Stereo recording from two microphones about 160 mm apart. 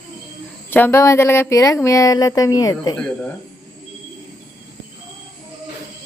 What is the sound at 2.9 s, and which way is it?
Speech, 10° left (ahead or behind).